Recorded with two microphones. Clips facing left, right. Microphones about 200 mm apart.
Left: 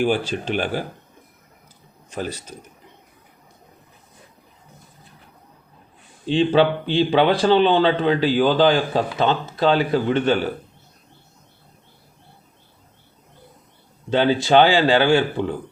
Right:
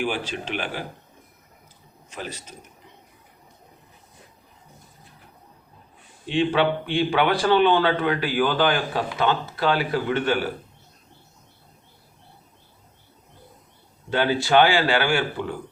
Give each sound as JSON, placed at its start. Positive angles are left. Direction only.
{"t": 0.0, "sound": "speech", "side_deg": 35}
{"t": 6.2, "sound": "a man's voice", "side_deg": 30}
{"t": 14.1, "sound": "a man's voice", "side_deg": 25}